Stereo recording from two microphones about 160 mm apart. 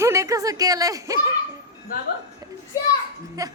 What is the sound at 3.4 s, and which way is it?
Speech, 20° right (ahead or behind).